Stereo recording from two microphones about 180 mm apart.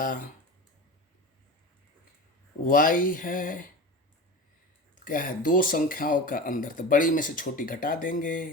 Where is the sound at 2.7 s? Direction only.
50° left (ahead or behind).